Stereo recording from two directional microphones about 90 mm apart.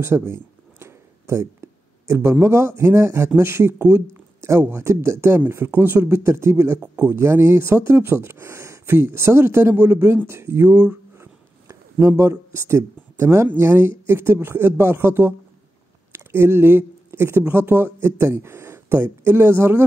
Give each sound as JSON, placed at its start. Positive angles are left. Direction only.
{"t": 0.0, "sound": "speech", "side_deg": -30}